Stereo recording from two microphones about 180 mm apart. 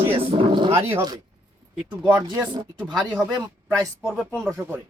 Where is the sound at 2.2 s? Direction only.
25° right (ahead or behind).